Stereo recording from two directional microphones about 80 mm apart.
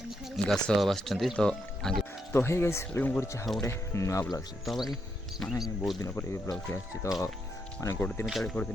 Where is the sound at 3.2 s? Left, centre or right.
Left.